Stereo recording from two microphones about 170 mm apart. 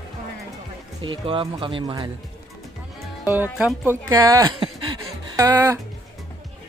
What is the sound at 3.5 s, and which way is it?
A woman's voice, 10° right (ahead or behind).